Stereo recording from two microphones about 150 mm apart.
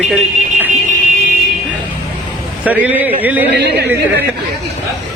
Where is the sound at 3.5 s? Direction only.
90° right.